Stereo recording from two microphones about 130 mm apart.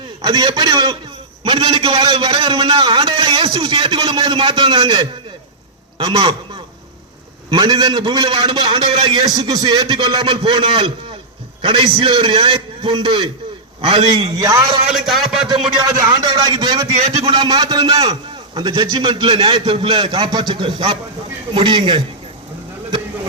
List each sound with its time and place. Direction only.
0.2 s a man's voice: 40° right (ahead or behind)
7.5 s a man's voice: 30° right (ahead or behind)
13.8 s a man's voice: 50° right (ahead or behind)
14.3 s a man's voice: 25° right (ahead or behind)
14.8 s a man's voice: centre (ahead or behind)
16.0 s a man's voice: 35° right (ahead or behind)
17.0 s a man's voice: 55° right (ahead or behind)
17.3 s a man's voice: 35° right (ahead or behind)